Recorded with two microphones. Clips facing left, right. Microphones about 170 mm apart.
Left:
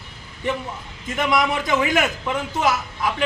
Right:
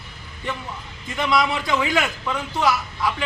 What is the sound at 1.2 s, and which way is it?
A man's voice, 20° left (ahead or behind).